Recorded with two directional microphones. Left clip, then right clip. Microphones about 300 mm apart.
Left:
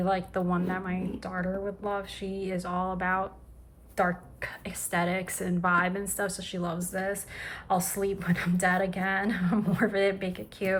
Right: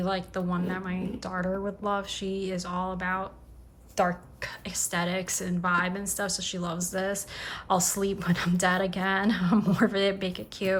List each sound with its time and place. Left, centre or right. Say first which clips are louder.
0.0 s a woman's voice: left 2 dB; centre